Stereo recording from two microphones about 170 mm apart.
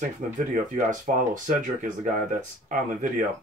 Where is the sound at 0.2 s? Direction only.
45° right (ahead or behind).